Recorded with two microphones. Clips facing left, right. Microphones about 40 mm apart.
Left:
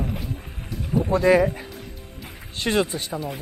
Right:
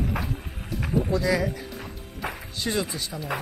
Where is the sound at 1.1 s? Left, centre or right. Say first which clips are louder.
Left 10 dB; left.